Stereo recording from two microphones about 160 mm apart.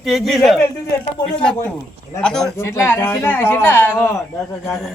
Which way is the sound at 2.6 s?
15° left (ahead or behind).